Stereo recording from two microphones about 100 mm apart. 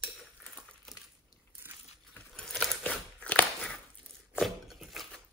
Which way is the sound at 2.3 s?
5° left (ahead or behind).